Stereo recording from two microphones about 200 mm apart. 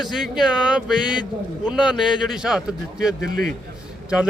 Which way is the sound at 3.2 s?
50° right (ahead or behind).